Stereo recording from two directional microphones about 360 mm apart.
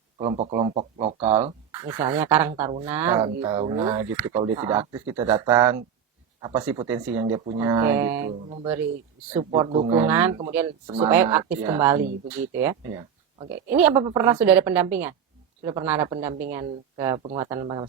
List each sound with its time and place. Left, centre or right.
0.2 s speech: centre
1.9 s speech: centre
2.6 s speech: centre
2.8 s a woman's voice: centre